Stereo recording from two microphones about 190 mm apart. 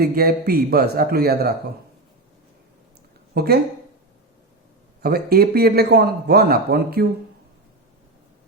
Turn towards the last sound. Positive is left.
turn(degrees=-55)  # may be behind; listen again after turning